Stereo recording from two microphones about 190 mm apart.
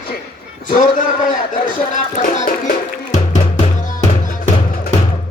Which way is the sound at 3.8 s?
40° left (ahead or behind).